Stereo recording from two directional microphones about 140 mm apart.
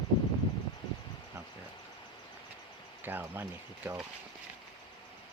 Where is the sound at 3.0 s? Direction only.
15° right (ahead or behind).